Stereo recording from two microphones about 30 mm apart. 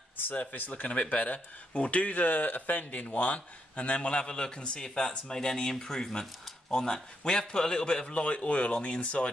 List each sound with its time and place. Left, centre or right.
0.3 s a man's voice: left
0.9 s speech: left
2.2 s a man's voice: left
2.9 s a man's voice: left
8.1 s speech: left